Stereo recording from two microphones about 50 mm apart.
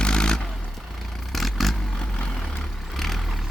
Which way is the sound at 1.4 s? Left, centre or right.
Centre.